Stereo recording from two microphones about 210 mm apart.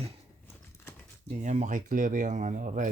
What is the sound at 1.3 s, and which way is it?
Speech, 35° right (ahead or behind).